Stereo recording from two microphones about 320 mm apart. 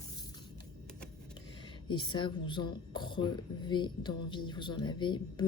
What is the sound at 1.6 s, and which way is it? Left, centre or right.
Speech, centre.